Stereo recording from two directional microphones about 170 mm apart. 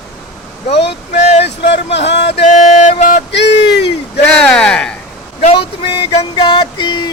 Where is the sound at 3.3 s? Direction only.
90° left.